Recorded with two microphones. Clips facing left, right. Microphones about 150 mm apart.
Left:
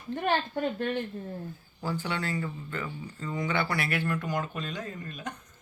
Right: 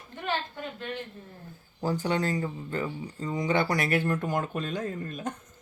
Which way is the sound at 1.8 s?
40° right (ahead or behind).